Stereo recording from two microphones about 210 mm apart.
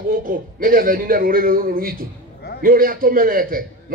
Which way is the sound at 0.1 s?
40° right (ahead or behind).